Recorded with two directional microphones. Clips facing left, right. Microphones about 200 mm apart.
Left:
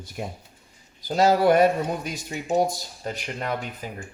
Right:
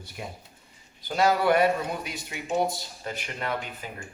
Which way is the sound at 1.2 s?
40° left (ahead or behind).